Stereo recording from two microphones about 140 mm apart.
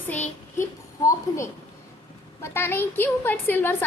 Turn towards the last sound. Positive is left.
turn(degrees=15)  # may be behind; listen again after turning